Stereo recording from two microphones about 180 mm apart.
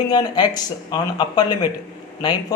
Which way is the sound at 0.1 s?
20° left (ahead or behind).